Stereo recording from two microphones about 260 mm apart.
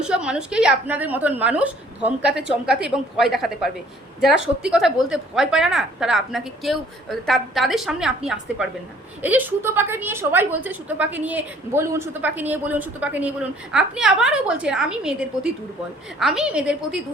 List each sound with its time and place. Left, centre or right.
0.0 s a woman's voice: centre
4.7 s a woman's voice: centre